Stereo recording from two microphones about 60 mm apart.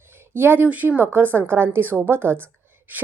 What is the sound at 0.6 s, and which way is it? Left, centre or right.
A woman's voice, right.